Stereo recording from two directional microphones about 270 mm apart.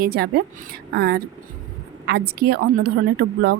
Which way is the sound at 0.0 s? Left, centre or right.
Right.